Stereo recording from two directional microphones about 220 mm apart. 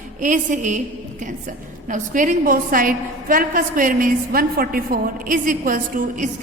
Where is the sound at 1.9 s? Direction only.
35° right (ahead or behind).